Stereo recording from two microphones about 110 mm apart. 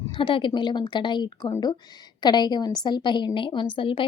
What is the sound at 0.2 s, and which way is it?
A woman's voice, 50° left (ahead or behind).